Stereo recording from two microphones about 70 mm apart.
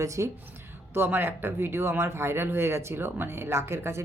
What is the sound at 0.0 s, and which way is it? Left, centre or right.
Speech, right.